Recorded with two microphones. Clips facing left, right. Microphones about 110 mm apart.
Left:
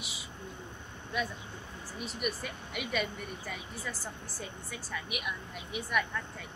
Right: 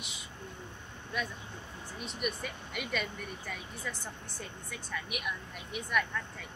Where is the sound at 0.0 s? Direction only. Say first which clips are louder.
Left 2 dB; 5° left (ahead or behind).